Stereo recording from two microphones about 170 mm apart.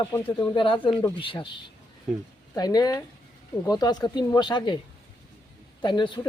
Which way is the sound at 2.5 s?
20° left (ahead or behind).